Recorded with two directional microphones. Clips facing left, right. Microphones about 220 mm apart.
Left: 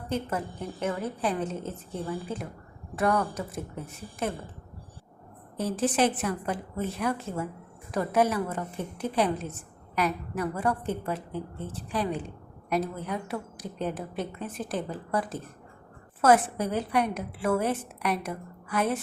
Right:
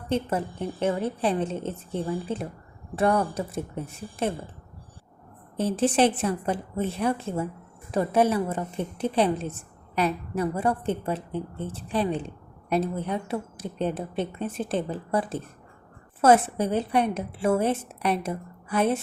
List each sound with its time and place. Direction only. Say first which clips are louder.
0.1 s a woman's voice: right 4 dB; 30° right (ahead or behind)
5.5 s a woman's voice: right 4 dB; 25° right (ahead or behind)